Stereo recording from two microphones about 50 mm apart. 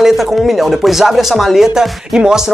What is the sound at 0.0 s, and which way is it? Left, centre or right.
Speech, centre.